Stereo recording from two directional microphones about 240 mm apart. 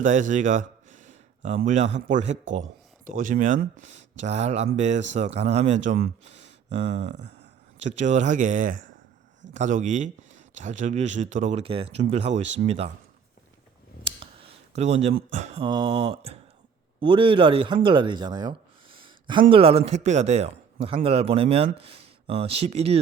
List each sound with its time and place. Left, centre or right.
0.0 s speech: right
7.1 s a sound: right
7.8 s speech: right
14.0 s clicking: right
15.1 s speech: right